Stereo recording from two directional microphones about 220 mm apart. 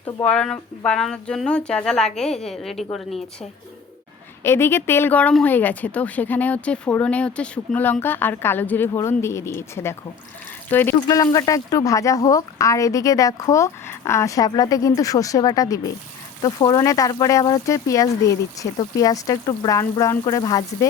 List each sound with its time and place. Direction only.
0.3 s speech: 5° left (ahead or behind)
4.4 s a woman's voice: 10° left (ahead or behind)